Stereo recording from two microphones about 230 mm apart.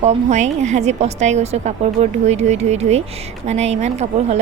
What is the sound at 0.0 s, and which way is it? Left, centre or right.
A woman's voice, right.